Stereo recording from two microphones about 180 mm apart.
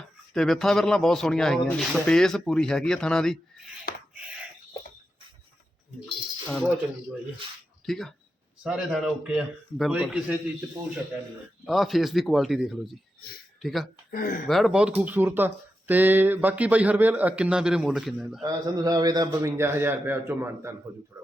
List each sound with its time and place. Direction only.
0.3 s speech: centre (ahead or behind)
6.5 s speech: centre (ahead or behind)
7.9 s speech: centre (ahead or behind)
11.6 s speech: centre (ahead or behind)
14.1 s speech: 50° left (ahead or behind)
14.4 s speech: centre (ahead or behind)
18.4 s speech: 20° right (ahead or behind)